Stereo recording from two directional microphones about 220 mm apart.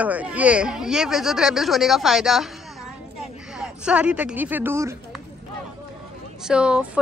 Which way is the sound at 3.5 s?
5° right (ahead or behind).